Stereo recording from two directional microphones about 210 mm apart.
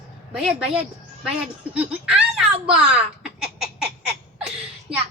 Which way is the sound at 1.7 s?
5° right (ahead or behind).